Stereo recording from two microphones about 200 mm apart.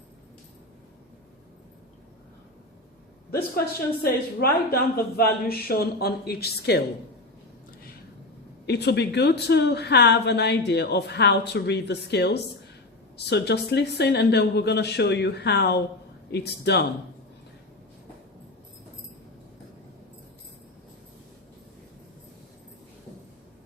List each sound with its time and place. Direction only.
4.0 s a woman's voice: 50° left (ahead or behind)
8.6 s a woman's voice: 55° left (ahead or behind)